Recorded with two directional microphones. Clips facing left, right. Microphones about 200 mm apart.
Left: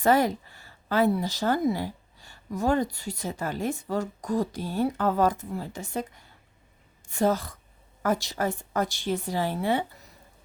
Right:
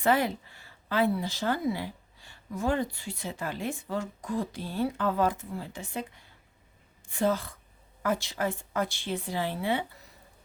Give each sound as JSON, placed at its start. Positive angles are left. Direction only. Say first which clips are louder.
{"t": 0.0, "sound": "speech", "louder": "left 4 dB", "side_deg": 40}